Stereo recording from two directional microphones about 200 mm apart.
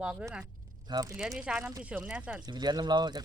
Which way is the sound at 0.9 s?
20° right (ahead or behind).